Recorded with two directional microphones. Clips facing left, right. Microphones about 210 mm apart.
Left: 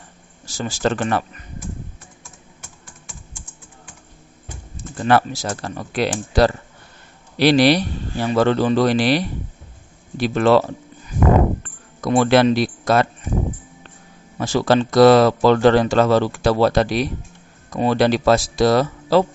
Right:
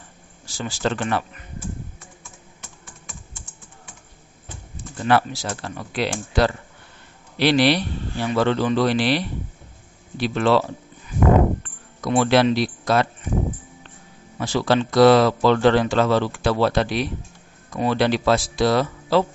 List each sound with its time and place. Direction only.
0.4 s speech: 45° left (ahead or behind)
4.9 s speech: 45° left (ahead or behind)
11.6 s a sound: 45° left (ahead or behind)
14.3 s speech: 45° left (ahead or behind)